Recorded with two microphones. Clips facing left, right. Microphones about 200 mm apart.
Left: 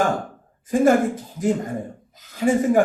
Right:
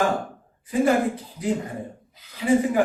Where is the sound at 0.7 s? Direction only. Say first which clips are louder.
Left 4 dB; 45° left (ahead or behind).